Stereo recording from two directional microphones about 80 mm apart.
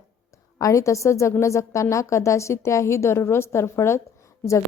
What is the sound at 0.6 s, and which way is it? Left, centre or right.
A woman's voice, left.